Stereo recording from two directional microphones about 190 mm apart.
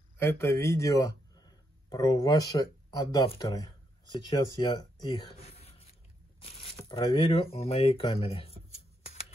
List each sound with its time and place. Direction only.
0.2 s speech: 15° left (ahead or behind); by 8.5 s 30° left (ahead or behind)
9.0 s shuffling cards: 35° left (ahead or behind)